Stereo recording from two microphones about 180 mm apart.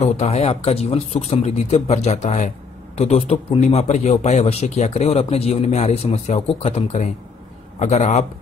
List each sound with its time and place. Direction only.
0.0 s a man's voice: 35° left (ahead or behind)